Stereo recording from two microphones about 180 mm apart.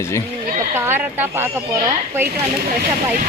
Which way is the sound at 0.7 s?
10° right (ahead or behind).